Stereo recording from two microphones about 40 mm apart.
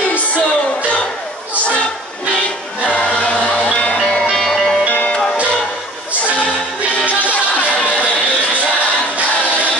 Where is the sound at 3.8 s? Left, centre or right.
Left.